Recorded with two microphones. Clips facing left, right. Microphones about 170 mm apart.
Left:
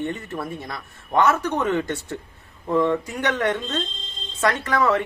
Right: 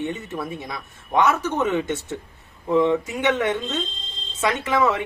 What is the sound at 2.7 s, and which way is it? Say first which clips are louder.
Speech: right 2 dB; 15° right (ahead or behind).